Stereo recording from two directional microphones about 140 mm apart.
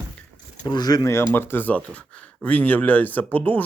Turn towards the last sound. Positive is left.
turn(degrees=15)  # may be behind; listen again after turning